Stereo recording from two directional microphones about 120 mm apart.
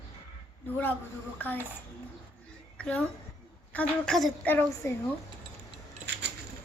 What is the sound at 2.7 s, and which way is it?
A woman's voice, 10° left (ahead or behind).